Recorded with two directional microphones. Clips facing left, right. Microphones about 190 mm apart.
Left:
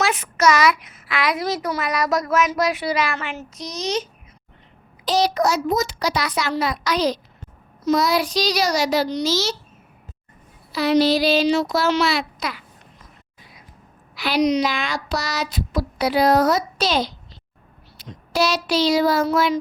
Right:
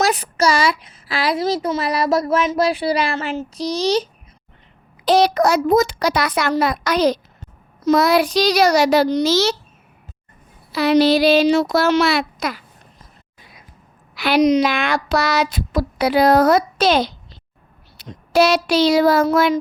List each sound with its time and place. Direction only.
0.0 s a child's voice: 35° right (ahead or behind)
5.0 s a woman's voice: 55° right (ahead or behind)
10.7 s speech: 60° right (ahead or behind); by 13.1 s 45° right (ahead or behind)
14.2 s a woman's voice: 55° right (ahead or behind)
17.9 s a sound: 60° right (ahead or behind)